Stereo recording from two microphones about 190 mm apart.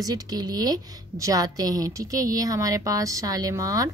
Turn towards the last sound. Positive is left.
turn(degrees=-20)  # may be behind; listen again after turning